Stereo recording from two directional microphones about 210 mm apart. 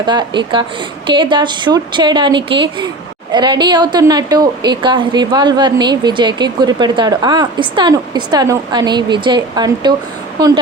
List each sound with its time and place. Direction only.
0.0 s a woman's voice: 20° right (ahead or behind)